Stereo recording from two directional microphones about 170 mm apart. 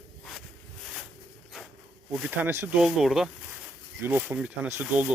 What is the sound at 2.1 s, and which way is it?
Speech, 10° right (ahead or behind).